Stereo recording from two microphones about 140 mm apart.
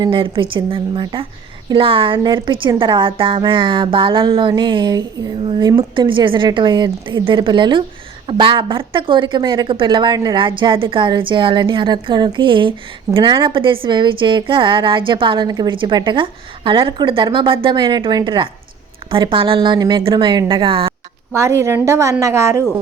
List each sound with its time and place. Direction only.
0.0 s a woman's voice: 35° right (ahead or behind)
21.3 s a woman's voice: 20° right (ahead or behind)